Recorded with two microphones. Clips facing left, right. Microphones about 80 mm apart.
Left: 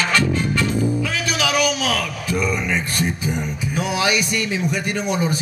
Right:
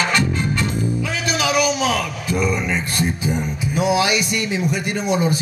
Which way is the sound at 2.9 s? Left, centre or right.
Centre.